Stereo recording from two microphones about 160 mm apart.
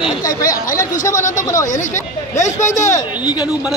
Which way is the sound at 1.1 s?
50° left (ahead or behind).